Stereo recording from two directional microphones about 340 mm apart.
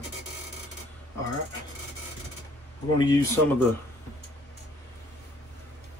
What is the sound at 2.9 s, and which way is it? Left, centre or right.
Speech, centre.